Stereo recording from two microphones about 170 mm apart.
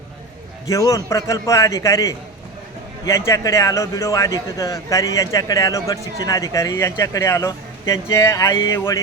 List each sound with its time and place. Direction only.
0.7 s a man's voice: 20° left (ahead or behind)